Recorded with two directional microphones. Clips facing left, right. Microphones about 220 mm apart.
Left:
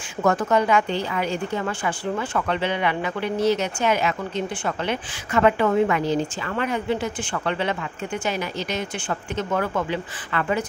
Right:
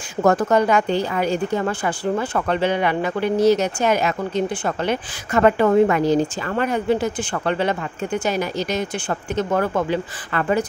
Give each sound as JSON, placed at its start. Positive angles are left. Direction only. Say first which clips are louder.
{"t": 0.2, "sound": "a woman's voice", "louder": "right 4 dB", "side_deg": -40}